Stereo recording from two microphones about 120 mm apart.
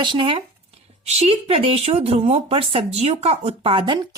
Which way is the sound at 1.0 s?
60° right (ahead or behind).